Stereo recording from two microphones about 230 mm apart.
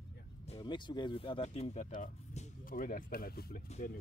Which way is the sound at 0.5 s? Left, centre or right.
Centre.